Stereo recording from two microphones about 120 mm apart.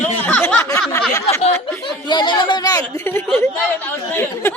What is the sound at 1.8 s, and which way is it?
Speech, 40° left (ahead or behind).